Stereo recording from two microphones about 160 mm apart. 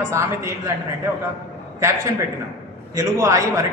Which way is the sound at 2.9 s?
20° right (ahead or behind).